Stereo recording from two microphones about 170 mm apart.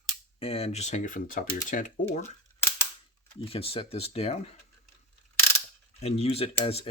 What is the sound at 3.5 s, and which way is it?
Speech, 35° left (ahead or behind).